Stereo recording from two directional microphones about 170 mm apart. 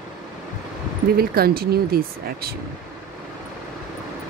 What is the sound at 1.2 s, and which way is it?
Speech, 65° right (ahead or behind).